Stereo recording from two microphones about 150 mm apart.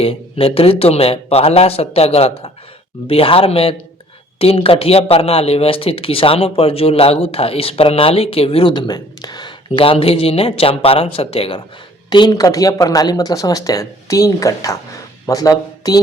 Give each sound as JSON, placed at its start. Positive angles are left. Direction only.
{"t": 0.0, "sound": "speech", "side_deg": 40}
{"t": 12.1, "sound": "speech", "side_deg": 25}